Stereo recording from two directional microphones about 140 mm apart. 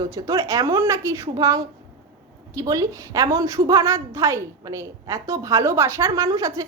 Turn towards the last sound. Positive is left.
turn(degrees=-25)  # may be behind; listen again after turning